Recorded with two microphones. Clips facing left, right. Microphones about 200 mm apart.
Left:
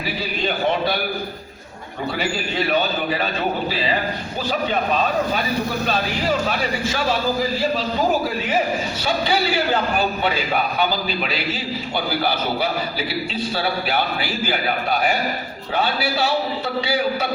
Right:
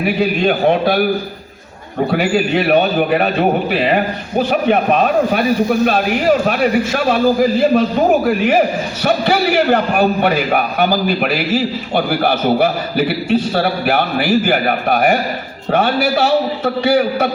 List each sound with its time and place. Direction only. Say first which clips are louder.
0.0 s a man's voice: right 10 dB; 60° right (ahead or behind)